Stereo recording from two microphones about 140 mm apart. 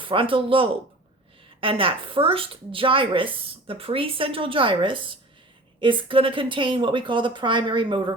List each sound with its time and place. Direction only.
0.0 s a woman's voice: 40° right (ahead or behind)